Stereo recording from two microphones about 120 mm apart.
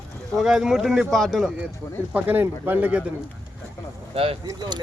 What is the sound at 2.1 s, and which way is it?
Speech, 15° right (ahead or behind).